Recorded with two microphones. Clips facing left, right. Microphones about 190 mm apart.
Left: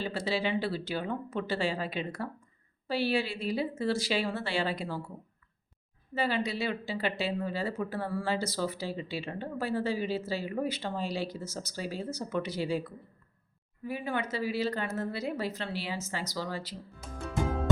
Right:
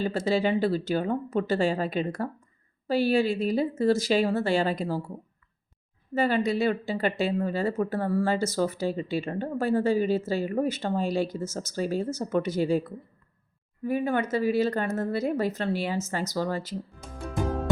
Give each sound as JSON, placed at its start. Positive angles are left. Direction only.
{"t": 0.0, "sound": "speech", "side_deg": -45}
{"t": 6.1, "sound": "speech", "side_deg": -50}